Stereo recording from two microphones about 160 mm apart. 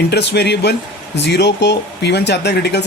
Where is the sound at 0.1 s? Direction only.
90° left.